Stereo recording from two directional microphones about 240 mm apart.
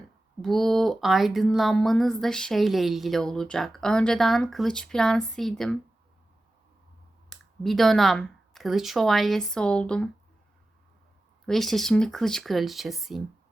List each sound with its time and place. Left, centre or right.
0.4 s speech: centre
7.3 s speech: centre
11.4 s speech: centre